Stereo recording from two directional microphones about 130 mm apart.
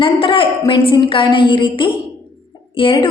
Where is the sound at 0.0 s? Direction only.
40° left (ahead or behind).